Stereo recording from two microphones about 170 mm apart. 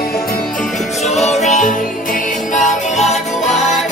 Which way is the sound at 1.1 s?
40° left (ahead or behind).